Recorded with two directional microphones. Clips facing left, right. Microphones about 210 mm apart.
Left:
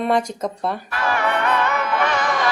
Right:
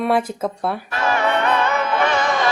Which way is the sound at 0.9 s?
25° right (ahead or behind).